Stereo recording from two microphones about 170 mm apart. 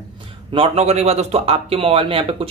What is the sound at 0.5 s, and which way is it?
A man's voice, 35° right (ahead or behind).